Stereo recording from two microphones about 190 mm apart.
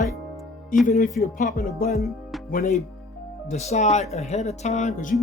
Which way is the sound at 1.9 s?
Centre (ahead or behind).